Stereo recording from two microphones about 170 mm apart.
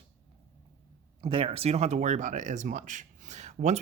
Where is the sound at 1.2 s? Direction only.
30° right (ahead or behind).